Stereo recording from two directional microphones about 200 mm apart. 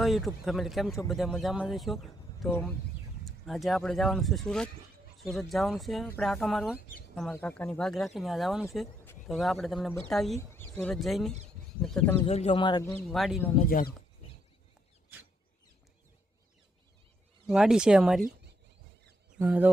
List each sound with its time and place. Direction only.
0.0 s speech: centre (ahead or behind)
2.5 s a man's voice: 10° left (ahead or behind)
12.2 s speech: 30° left (ahead or behind); by 13.1 s 15° left (ahead or behind)
13.1 s speech: centre (ahead or behind)
13.6 s speech: 45° left (ahead or behind)
17.4 s speech: 5° right (ahead or behind)
18.2 s a sound: 45° right (ahead or behind)
19.4 s speech: 10° right (ahead or behind)